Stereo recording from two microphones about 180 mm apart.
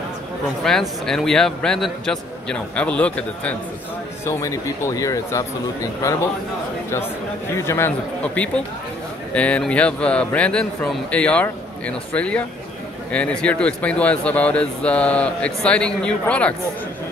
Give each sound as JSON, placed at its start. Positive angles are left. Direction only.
{"t": 0.7, "sound": "a man's voice", "side_deg": 5}
{"t": 4.3, "sound": "a man's voice", "side_deg": 15}
{"t": 7.5, "sound": "a man's voice", "side_deg": 15}